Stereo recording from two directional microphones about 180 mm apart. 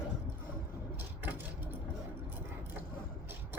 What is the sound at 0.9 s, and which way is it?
Vehicle, 10° right (ahead or behind).